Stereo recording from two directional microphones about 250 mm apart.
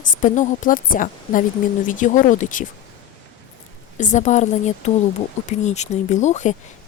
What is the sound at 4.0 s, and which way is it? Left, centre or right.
A woman's voice, left.